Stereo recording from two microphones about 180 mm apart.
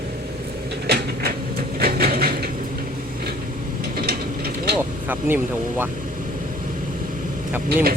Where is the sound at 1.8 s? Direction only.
60° right (ahead or behind).